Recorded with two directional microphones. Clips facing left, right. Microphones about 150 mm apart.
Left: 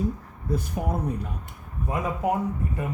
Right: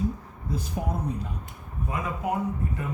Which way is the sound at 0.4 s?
55° left (ahead or behind).